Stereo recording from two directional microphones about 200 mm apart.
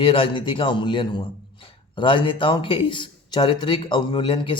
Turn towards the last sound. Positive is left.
turn(degrees=25)  # may be behind; listen again after turning